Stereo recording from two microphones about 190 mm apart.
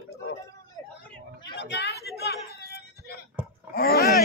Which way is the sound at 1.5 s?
65° left (ahead or behind).